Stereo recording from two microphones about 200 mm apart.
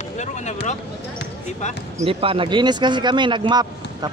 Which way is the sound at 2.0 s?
30° right (ahead or behind).